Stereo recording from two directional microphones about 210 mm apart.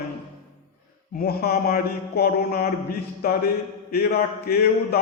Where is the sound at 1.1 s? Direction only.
45° left (ahead or behind).